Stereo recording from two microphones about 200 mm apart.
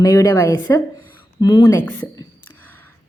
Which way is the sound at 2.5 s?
10° left (ahead or behind).